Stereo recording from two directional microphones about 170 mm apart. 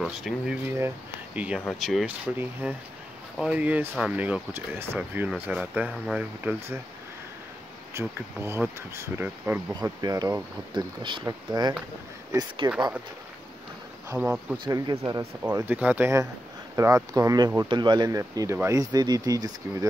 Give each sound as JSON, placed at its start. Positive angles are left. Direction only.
{"t": 0.0, "sound": "speech", "side_deg": -5}
{"t": 3.3, "sound": "speech", "side_deg": -5}
{"t": 7.9, "sound": "speech", "side_deg": -15}
{"t": 14.1, "sound": "speech", "side_deg": -10}
{"t": 14.6, "sound": "speech", "side_deg": -25}
{"t": 15.5, "sound": "speech", "side_deg": -10}